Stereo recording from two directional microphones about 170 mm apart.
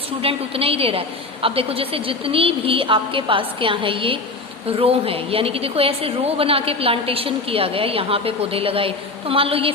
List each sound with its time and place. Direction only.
0.2 s a woman's voice: 35° right (ahead or behind)